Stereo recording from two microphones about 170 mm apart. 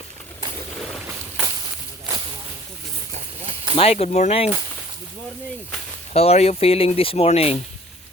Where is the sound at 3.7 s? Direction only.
35° left (ahead or behind).